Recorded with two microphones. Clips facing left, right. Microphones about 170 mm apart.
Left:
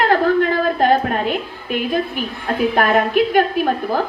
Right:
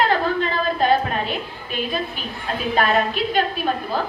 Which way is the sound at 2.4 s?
55° left (ahead or behind).